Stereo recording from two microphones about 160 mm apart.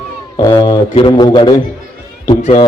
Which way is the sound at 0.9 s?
30° left (ahead or behind).